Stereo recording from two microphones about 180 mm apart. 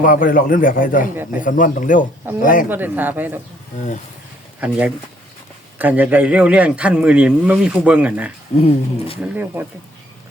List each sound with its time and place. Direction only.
0.0 s a man's voice: 50° left (ahead or behind)
2.6 s a man's voice: 10° right (ahead or behind)
5.8 s a man's voice: 10° right (ahead or behind)
8.5 s speech: 35° left (ahead or behind)
9.2 s a man's voice: 10° right (ahead or behind)